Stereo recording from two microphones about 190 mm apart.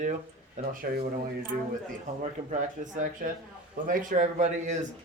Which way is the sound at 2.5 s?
40° right (ahead or behind).